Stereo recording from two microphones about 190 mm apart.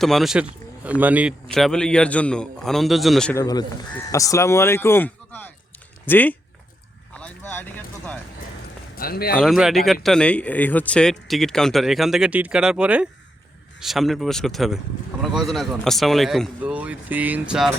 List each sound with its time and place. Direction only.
0.0 s speech: centre (ahead or behind)
1.5 s speech: 5° left (ahead or behind)
3.3 s speech: 20° left (ahead or behind)
7.1 s vehicle: 5° left (ahead or behind)
9.0 s speech: 50° left (ahead or behind)
9.3 s speech: centre (ahead or behind)